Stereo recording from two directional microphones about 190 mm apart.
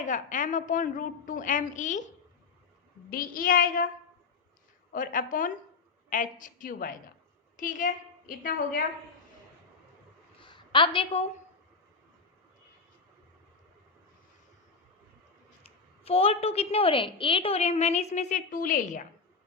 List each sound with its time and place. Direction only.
0.0 s a woman's voice: 40° left (ahead or behind)
3.1 s a woman's voice: 45° left (ahead or behind)
4.9 s a woman's voice: 45° left (ahead or behind)
10.3 s a sound: 25° left (ahead or behind)
16.0 s a woman's voice: 30° left (ahead or behind)